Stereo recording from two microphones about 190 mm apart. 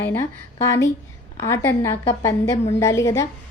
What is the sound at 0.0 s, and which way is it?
A woman's voice, 10° left (ahead or behind).